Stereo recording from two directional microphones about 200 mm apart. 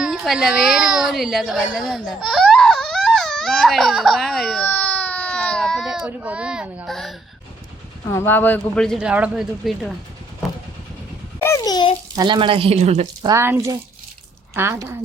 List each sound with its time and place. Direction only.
0.0 s a child's voice: 5° right (ahead or behind)
2.0 s a sound: centre (ahead or behind)
8.1 s a child's voice: 10° left (ahead or behind)
10.4 s vehicle: centre (ahead or behind)
11.3 s a sound: 15° left (ahead or behind)
12.1 s speech: 20° right (ahead or behind)
13.2 s speech: 15° right (ahead or behind)